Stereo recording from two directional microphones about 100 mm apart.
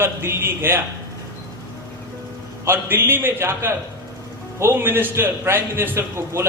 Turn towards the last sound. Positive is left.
turn(degrees=-25)  # may be behind; listen again after turning